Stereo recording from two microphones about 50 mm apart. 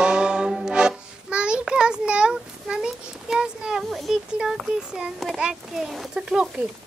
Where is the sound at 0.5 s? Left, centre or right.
Centre.